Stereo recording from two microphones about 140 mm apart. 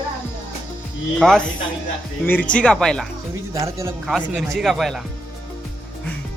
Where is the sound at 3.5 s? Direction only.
20° right (ahead or behind).